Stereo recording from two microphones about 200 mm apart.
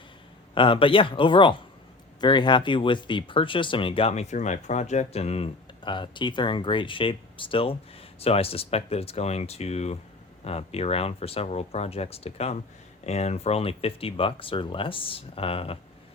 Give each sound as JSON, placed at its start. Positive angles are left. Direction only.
{"t": 0.5, "sound": "speech", "side_deg": 25}